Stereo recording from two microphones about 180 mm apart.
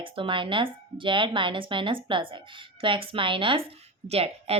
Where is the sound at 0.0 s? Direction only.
30° right (ahead or behind).